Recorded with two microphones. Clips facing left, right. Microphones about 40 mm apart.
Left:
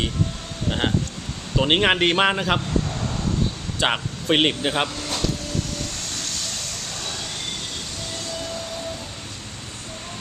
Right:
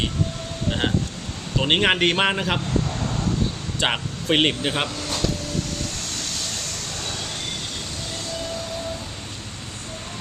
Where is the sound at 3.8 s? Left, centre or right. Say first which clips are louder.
Left 1 dB; centre.